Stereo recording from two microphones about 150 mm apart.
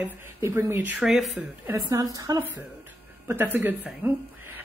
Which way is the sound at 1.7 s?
25° right (ahead or behind).